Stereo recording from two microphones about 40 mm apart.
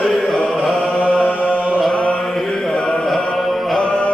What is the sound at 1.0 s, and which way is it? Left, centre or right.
Chant, left.